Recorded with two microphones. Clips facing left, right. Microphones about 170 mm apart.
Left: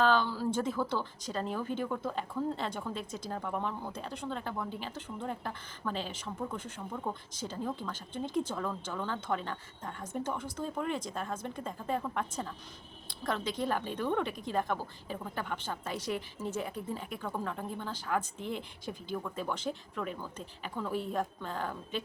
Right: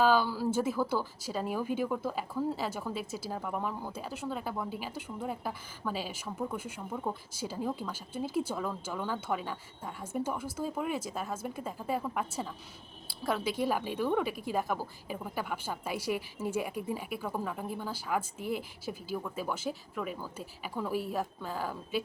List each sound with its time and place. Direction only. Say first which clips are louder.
0.0 s speech: right 2 dB; 10° right (ahead or behind)